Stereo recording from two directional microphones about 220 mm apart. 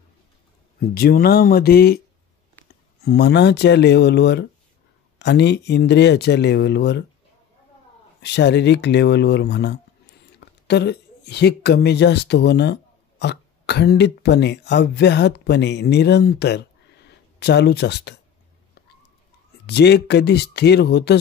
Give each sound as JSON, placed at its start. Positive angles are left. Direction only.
{"t": 0.7, "sound": "speech", "side_deg": 45}
{"t": 8.2, "sound": "speech", "side_deg": 50}
{"t": 19.6, "sound": "speech", "side_deg": 50}